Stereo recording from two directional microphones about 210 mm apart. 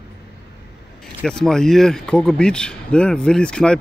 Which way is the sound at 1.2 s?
Centre (ahead or behind).